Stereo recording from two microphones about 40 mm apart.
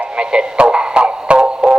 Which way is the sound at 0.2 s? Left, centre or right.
Right.